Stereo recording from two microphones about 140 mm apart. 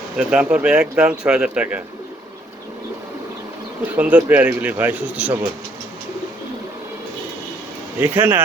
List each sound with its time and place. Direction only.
0.2 s speech: 5° right (ahead or behind)
3.9 s speech: 10° right (ahead or behind)
7.9 s speech: 15° right (ahead or behind)